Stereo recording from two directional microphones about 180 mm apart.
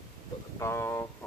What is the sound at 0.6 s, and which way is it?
Speech, 15° left (ahead or behind).